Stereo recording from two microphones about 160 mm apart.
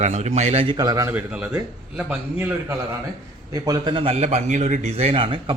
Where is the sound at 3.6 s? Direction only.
25° right (ahead or behind).